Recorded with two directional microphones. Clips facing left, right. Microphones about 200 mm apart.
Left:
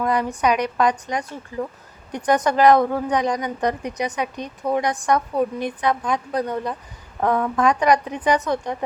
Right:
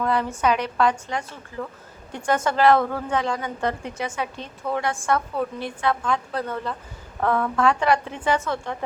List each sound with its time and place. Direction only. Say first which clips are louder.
0.0 s a woman's voice: left 2 dB; 15° left (ahead or behind)